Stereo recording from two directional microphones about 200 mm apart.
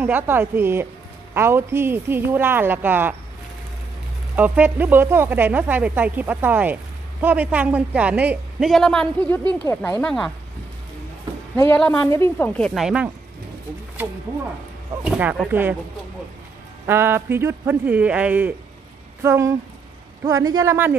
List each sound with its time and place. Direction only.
0.0 s speech: 10° right (ahead or behind)
4.4 s speech: 10° right (ahead or behind)
9.4 s speech: 20° right (ahead or behind)
9.7 s speech: 10° left (ahead or behind)
11.5 s speech: 15° left (ahead or behind); by 13.1 s 5° right (ahead or behind)
15.0 s speech: 5° right (ahead or behind)
16.8 s speech: 10° right (ahead or behind)